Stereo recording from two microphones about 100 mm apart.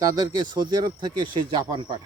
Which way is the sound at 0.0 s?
40° right (ahead or behind).